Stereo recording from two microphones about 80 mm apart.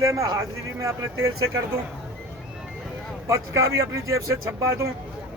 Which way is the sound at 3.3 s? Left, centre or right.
Right.